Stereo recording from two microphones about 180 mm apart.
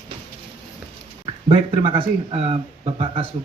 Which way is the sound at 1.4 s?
30° right (ahead or behind).